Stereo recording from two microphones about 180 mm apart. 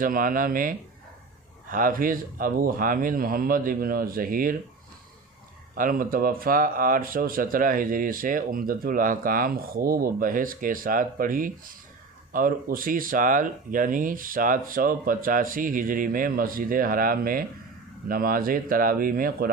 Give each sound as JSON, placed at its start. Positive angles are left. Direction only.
{"t": 0.0, "sound": "speech", "side_deg": -50}
{"t": 5.7, "sound": "speech", "side_deg": -50}